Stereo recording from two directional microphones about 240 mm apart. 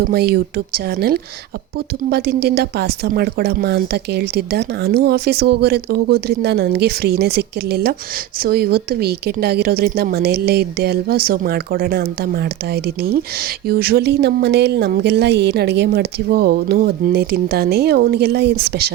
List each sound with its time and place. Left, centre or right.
0.0 s a woman's voice: right